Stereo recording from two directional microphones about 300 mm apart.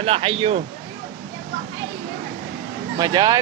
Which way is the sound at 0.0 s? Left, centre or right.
Centre.